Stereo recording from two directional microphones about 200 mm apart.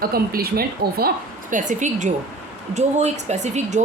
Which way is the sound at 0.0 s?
45° right (ahead or behind).